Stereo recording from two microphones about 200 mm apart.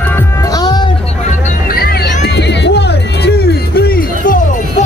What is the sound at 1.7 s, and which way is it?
Music, 50° left (ahead or behind).